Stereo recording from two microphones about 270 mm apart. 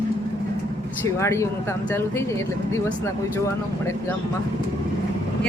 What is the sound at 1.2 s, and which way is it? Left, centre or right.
Speech, centre.